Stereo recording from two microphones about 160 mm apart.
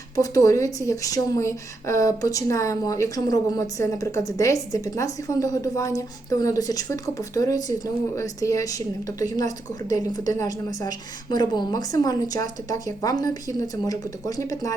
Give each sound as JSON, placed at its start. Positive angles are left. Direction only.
{"t": 0.2, "sound": "a woman's voice", "side_deg": 20}